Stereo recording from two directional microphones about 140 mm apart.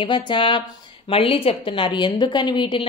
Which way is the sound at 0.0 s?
35° left (ahead or behind).